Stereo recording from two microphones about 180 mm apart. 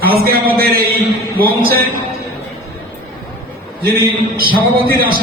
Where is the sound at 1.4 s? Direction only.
55° right (ahead or behind).